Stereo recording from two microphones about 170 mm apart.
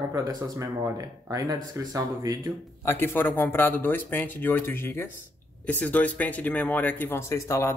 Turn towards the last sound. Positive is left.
turn(degrees=15)  # may be behind; listen again after turning